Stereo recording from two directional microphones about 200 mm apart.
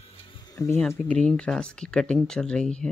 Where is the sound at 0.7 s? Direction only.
5° left (ahead or behind).